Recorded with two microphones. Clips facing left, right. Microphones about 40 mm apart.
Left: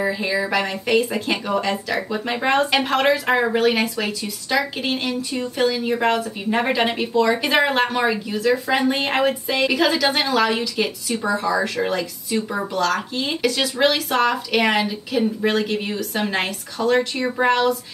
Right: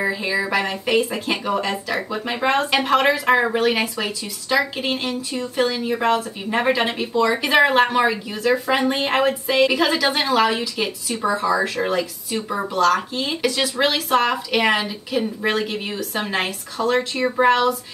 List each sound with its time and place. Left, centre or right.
0.0 s speech: centre
5.1 s speech: centre
5.6 s speech: centre